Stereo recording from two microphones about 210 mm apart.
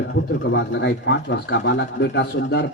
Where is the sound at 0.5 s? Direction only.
55° left (ahead or behind).